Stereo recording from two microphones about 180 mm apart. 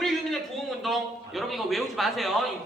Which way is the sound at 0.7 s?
Centre (ahead or behind).